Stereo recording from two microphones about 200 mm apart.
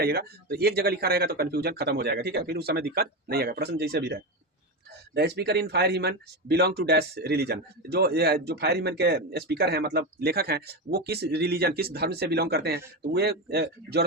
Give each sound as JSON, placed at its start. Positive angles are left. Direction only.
{"t": 0.0, "sound": "a man's voice", "side_deg": -50}